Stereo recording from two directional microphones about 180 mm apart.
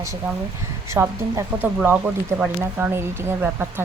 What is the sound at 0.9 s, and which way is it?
Speech, 15° right (ahead or behind).